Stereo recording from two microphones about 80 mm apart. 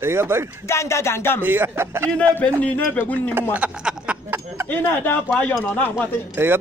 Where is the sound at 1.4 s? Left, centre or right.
Right.